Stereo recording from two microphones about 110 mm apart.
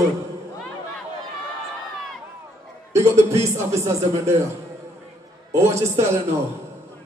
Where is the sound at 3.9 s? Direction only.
30° right (ahead or behind).